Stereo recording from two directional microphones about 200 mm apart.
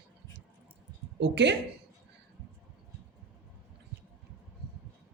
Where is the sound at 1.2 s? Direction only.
60° right (ahead or behind).